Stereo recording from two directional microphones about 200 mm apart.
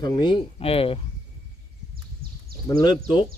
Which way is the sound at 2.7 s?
20° left (ahead or behind).